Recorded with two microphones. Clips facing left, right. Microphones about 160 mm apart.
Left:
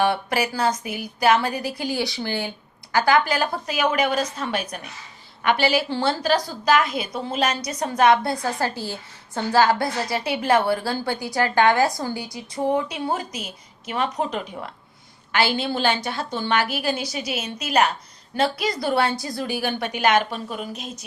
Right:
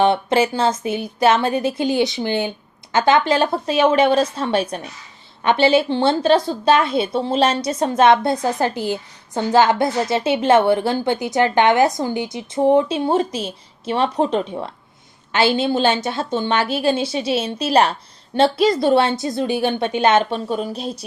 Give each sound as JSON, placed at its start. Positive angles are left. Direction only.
{"t": 0.0, "sound": "a woman's voice", "side_deg": -25}